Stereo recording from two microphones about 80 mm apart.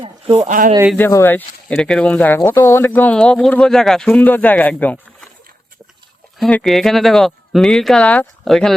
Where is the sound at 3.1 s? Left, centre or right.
Centre.